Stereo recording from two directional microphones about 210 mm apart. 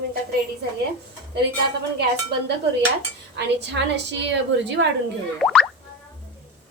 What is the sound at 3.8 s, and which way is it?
Speech, 55° right (ahead or behind).